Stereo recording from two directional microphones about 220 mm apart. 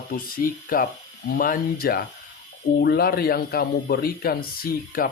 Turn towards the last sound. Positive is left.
turn(degrees=40)  # may be behind; listen again after turning